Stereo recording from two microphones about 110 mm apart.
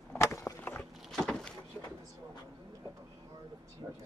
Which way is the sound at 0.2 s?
25° left (ahead or behind).